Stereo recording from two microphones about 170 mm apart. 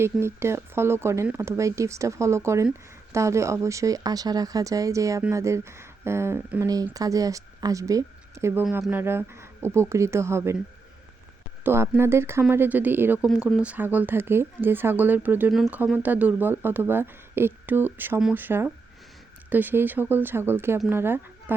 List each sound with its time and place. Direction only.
0.0 s a woman's voice: 15° right (ahead or behind)
11.6 s speech: 15° right (ahead or behind)
13.2 s speech: centre (ahead or behind)